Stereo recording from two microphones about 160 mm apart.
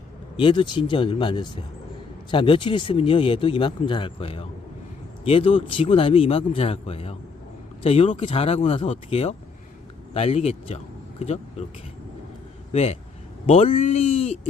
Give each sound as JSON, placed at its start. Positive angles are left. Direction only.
{"t": 0.3, "sound": "speech", "side_deg": 30}
{"t": 12.7, "sound": "speech", "side_deg": 40}